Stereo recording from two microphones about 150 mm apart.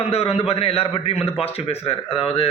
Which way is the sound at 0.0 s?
40° left (ahead or behind).